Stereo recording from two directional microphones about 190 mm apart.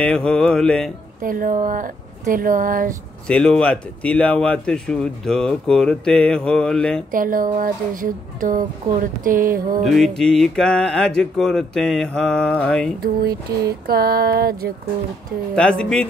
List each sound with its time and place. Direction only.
0.0 s speech: 5° left (ahead or behind)
1.2 s a woman's voice: 45° right (ahead or behind)
3.3 s speech: 5° left (ahead or behind)
7.1 s a woman's voice: 45° right (ahead or behind)
9.8 s speech: centre (ahead or behind)
13.0 s a woman's voice: 55° right (ahead or behind)
15.8 s speech: 5° left (ahead or behind)